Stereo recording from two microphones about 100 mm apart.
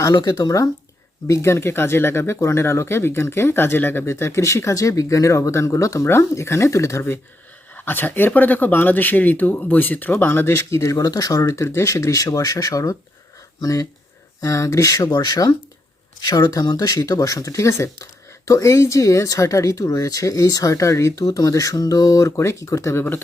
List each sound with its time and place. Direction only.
0.0 s speech: 40° left (ahead or behind); by 23.2 s 20° left (ahead or behind)